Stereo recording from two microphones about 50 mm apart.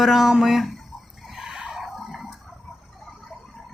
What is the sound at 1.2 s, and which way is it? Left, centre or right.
Chicken, centre.